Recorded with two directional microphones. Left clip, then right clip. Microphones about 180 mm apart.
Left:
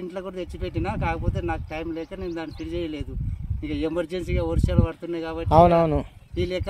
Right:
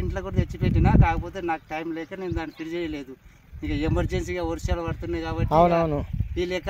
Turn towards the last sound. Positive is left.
turn(degrees=0)  # may be behind; listen again after turning